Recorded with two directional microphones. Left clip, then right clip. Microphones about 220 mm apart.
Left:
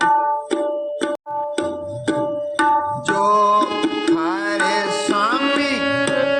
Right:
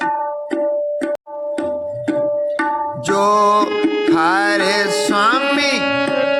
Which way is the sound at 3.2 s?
40° right (ahead or behind).